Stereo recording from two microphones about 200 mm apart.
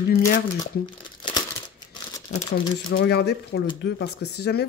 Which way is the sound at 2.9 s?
55° left (ahead or behind).